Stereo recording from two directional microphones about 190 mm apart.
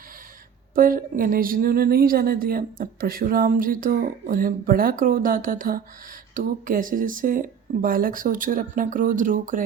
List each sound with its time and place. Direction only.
0.8 s a woman's voice: 45° right (ahead or behind)